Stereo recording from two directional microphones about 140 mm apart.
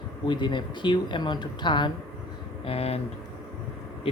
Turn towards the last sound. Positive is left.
turn(degrees=45)  # may be behind; listen again after turning